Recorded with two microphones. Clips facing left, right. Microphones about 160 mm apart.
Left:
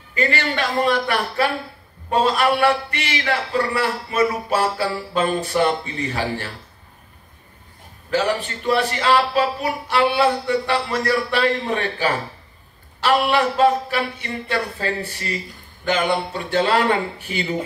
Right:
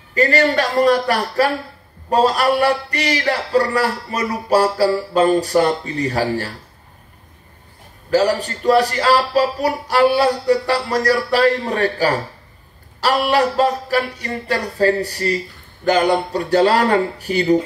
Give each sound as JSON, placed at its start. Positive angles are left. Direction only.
{"t": 0.1, "sound": "speech", "side_deg": -40}
{"t": 8.1, "sound": "speech", "side_deg": -40}